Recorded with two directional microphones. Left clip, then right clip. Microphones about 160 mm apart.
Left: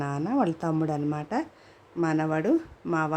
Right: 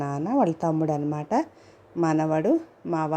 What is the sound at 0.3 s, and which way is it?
A woman's voice, 10° right (ahead or behind).